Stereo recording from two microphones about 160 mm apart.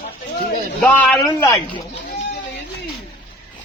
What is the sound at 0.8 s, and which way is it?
Speech, 5° left (ahead or behind).